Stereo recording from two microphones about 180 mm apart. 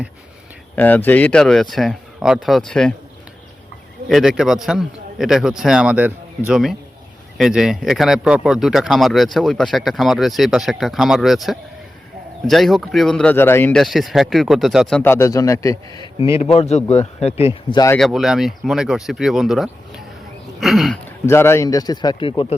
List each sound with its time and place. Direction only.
0.8 s speech: 10° left (ahead or behind)
4.1 s speech: centre (ahead or behind)
13.8 s speech: centre (ahead or behind); by 16.0 s 20° left (ahead or behind)
16.1 s speech: 15° right (ahead or behind)
16.4 s speech: 35° left (ahead or behind)
17.8 s speech: 5° left (ahead or behind)
21.2 s a man's voice: 15° left (ahead or behind); by 22.5 s 30° left (ahead or behind)